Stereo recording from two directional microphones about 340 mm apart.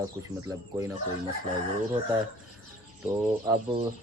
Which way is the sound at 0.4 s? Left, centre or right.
Centre.